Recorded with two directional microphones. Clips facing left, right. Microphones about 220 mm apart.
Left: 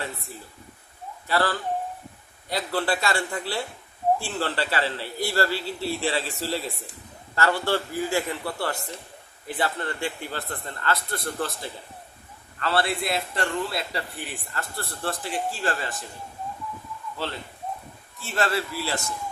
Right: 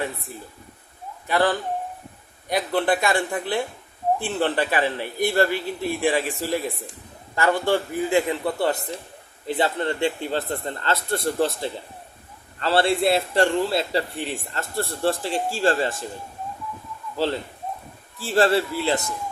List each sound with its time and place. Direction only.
1.3 s a man's voice: 20° right (ahead or behind)
18.2 s a man's voice: 30° right (ahead or behind)